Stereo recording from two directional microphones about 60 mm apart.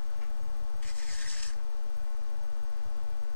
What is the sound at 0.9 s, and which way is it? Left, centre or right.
Rub, left.